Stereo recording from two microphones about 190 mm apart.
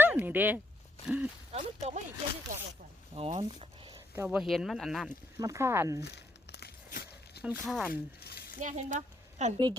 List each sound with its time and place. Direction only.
0.0 s a sound: 10° right (ahead or behind)
1.0 s speech: 10° right (ahead or behind)
1.5 s speech: 35° right (ahead or behind)
3.2 s speech: 30° right (ahead or behind)
4.1 s speech: 10° right (ahead or behind)
5.4 s speech: 15° right (ahead or behind)
6.0 s crumpling: 60° left (ahead or behind)
7.6 s speech: centre (ahead or behind)
8.2 s a sound: 55° left (ahead or behind)
8.6 s speech: 40° right (ahead or behind)